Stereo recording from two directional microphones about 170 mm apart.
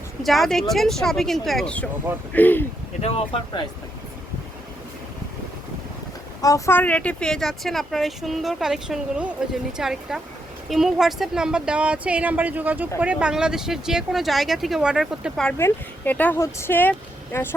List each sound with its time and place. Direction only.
0.2 s speech: centre (ahead or behind)
3.0 s speech: 35° left (ahead or behind)
6.4 s speech: 15° left (ahead or behind); by 15.5 s centre (ahead or behind)
15.5 s speech: 15° left (ahead or behind)